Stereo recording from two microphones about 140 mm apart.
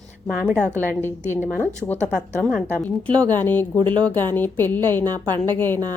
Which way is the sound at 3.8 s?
35° right (ahead or behind).